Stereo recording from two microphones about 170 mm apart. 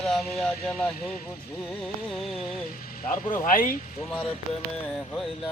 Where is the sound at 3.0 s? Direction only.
55° left (ahead or behind).